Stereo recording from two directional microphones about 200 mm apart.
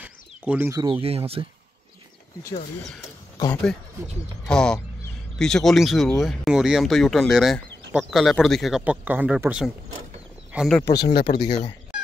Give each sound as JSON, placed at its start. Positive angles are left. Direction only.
{"t": 0.0, "sound": "a sound", "side_deg": -10}
{"t": 1.0, "sound": "speech", "side_deg": -30}
{"t": 4.5, "sound": "speech", "side_deg": 5}
{"t": 10.8, "sound": "speech", "side_deg": 20}
{"t": 11.1, "sound": "speech", "side_deg": 50}
{"t": 11.4, "sound": "speech", "side_deg": 20}